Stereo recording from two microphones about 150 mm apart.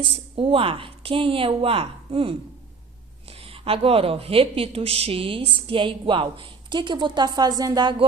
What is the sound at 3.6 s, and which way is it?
A woman's voice, 40° right (ahead or behind).